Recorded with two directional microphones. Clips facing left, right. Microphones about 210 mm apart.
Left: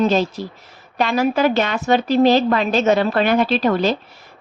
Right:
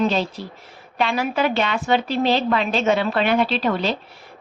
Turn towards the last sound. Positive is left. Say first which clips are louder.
# left 4 dB
turn(degrees=45)  # may be behind; listen again after turning